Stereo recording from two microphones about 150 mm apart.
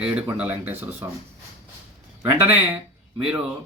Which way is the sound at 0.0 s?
5° right (ahead or behind).